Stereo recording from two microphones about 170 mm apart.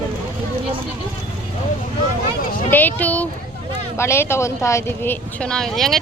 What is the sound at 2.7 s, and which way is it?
Speech, 10° left (ahead or behind).